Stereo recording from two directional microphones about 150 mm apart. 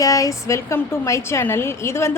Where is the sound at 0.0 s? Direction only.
25° left (ahead or behind).